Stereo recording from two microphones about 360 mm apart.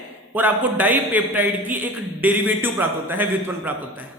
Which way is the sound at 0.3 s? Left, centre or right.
Centre.